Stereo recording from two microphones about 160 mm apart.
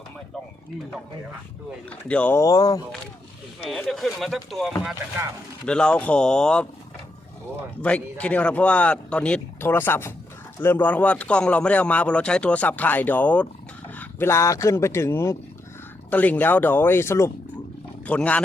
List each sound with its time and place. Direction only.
1.9 s speech: 10° left (ahead or behind)
3.8 s speech: centre (ahead or behind)
7.8 s speech: 10° left (ahead or behind)